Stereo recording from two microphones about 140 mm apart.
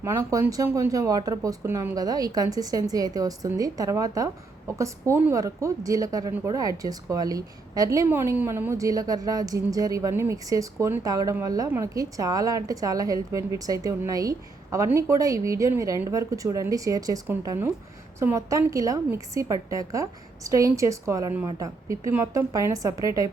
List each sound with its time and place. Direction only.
0.0 s a woman's voice: 20° right (ahead or behind)